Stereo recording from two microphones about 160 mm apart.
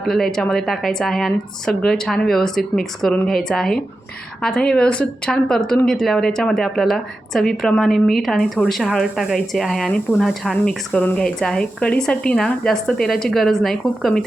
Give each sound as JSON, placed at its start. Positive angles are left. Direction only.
{"t": 0.1, "sound": "speech", "side_deg": 5}